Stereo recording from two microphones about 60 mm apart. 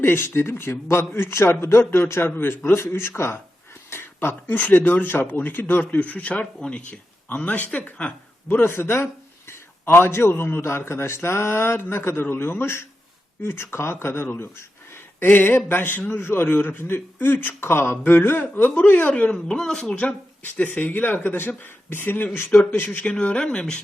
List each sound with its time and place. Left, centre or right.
0.0 s a man's voice: left; by 7.0 s centre
7.3 s speech: left
8.4 s a man's voice: left
19.1 s speech: centre
20.4 s a man's voice: left
23.2 s speech: centre